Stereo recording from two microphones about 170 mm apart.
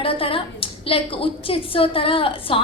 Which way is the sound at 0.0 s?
35° left (ahead or behind).